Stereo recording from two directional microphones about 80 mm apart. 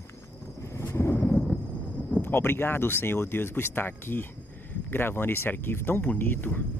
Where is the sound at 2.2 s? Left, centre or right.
Left.